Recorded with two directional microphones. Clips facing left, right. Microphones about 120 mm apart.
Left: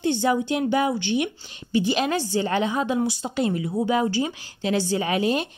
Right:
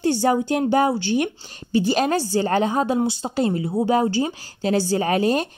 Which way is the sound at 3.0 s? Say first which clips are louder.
Right 2 dB; 30° right (ahead or behind).